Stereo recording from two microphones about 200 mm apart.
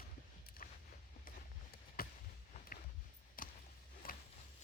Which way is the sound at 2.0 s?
45° left (ahead or behind).